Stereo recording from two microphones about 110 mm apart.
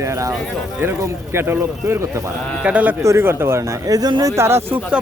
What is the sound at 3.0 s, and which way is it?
A man's voice, 25° right (ahead or behind).